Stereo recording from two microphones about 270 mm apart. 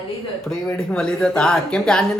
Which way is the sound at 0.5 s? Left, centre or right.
Centre.